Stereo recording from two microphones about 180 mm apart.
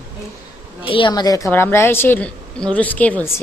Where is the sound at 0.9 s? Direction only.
30° left (ahead or behind).